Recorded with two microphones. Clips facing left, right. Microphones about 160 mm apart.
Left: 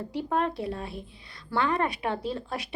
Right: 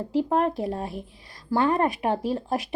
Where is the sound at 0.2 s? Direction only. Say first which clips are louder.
Right 5 dB; 40° right (ahead or behind).